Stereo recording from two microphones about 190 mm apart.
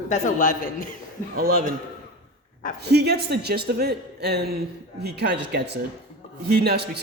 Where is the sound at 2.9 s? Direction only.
60° right (ahead or behind).